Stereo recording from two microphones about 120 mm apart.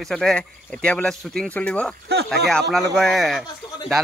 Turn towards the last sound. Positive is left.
turn(degrees=0)  # may be behind; listen again after turning